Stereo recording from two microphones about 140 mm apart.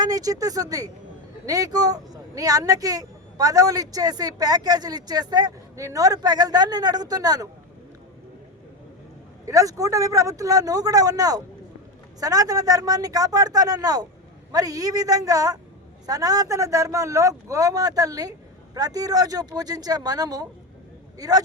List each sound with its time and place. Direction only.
0.0 s speech: 25° right (ahead or behind)
9.5 s speech: 25° right (ahead or behind)